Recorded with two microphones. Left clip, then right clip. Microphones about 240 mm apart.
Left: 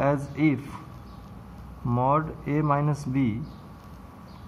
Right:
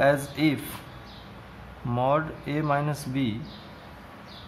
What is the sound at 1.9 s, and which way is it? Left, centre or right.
Speech, right.